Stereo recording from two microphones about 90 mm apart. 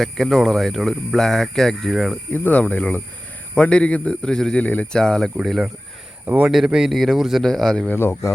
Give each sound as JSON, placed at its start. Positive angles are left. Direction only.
{"t": 0.0, "sound": "speech", "side_deg": 0}
{"t": 2.3, "sound": "a man's voice", "side_deg": 20}
{"t": 6.2, "sound": "speech", "side_deg": -15}
{"t": 6.7, "sound": "speech", "side_deg": -5}
{"t": 7.9, "sound": "speech", "side_deg": 25}